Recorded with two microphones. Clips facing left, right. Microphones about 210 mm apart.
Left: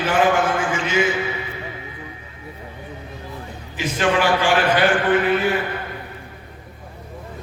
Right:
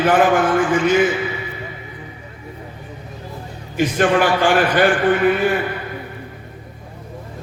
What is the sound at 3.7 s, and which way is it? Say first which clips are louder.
A man's voice: right 4 dB; 45° right (ahead or behind).